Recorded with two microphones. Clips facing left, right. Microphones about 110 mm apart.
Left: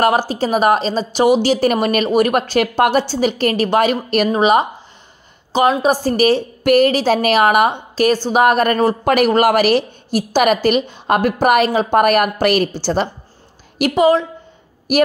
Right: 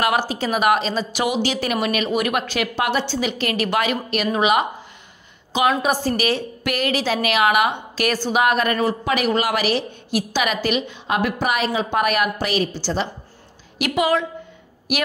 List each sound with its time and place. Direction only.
0.0 s a woman's voice: 35° left (ahead or behind)
8.3 s a woman's voice: 45° left (ahead or behind)
13.7 s a woman's voice: 35° left (ahead or behind)